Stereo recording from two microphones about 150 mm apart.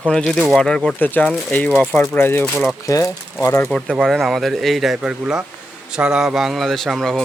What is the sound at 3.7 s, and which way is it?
Speech, 5° left (ahead or behind).